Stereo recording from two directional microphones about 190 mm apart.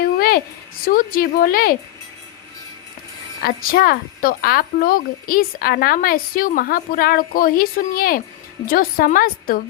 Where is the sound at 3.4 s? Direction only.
50° left (ahead or behind).